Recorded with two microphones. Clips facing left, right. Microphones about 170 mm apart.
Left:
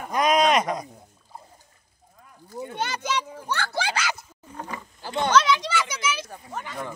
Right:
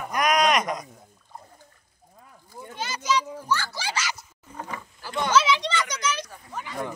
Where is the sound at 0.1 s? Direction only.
25° left (ahead or behind).